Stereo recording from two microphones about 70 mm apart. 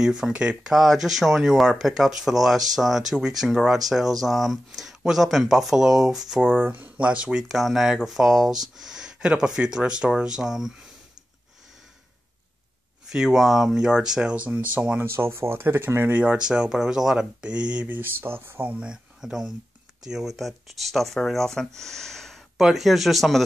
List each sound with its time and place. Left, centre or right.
0.0 s speech: centre
6.4 s speech: right
7.4 s speech: centre
13.1 s speech: centre
15.1 s speech: right; by 17.8 s centre
17.8 s speech: right
18.7 s speech: centre